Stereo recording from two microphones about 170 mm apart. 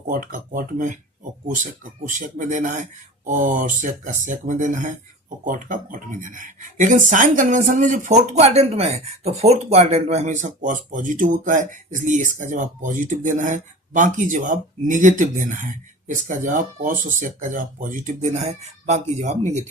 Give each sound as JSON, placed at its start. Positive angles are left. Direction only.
{"t": 0.1, "sound": "speech", "side_deg": -50}